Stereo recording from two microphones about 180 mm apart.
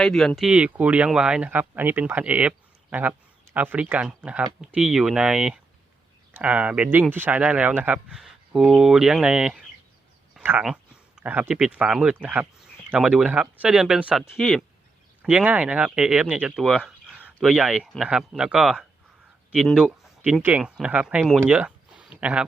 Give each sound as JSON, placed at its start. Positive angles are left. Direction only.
{"t": 0.0, "sound": "speech", "side_deg": 0}
{"t": 10.3, "sound": "a sound", "side_deg": -5}
{"t": 10.7, "sound": "speech", "side_deg": -5}